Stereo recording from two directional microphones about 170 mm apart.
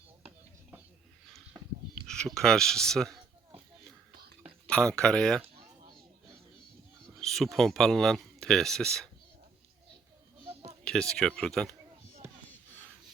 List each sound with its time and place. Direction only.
2.0 s speech: 5° left (ahead or behind)
4.7 s speech: 5° left (ahead or behind)
7.2 s speech: centre (ahead or behind)
10.5 s a sound: 35° right (ahead or behind)
11.1 s speech: 5° left (ahead or behind)